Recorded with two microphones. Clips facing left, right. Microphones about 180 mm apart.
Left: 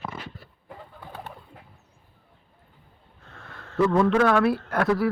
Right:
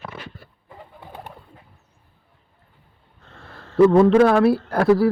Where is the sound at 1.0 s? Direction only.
15° right (ahead or behind).